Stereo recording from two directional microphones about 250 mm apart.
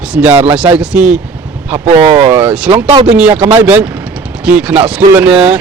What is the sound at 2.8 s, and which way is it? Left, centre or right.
Speech, right.